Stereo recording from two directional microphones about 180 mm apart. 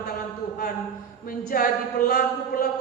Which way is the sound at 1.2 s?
55° left (ahead or behind).